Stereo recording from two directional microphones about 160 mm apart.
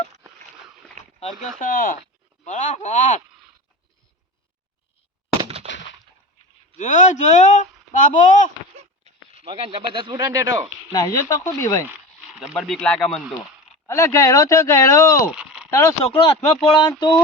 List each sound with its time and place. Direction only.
1.4 s speech: 55° left (ahead or behind)
2.4 s speech: 50° left (ahead or behind)
5.4 s a sound: 40° right (ahead or behind)
6.7 s speech: 50° left (ahead or behind)
9.0 s speech: 40° right (ahead or behind)
10.9 s speech: 20° left (ahead or behind)
11.9 s speech: 5° right (ahead or behind)
13.8 s speech: 20° left (ahead or behind)
15.3 s a sound: 5° right (ahead or behind)
15.7 s speech: 20° left (ahead or behind)
16.1 s speech: 35° left (ahead or behind)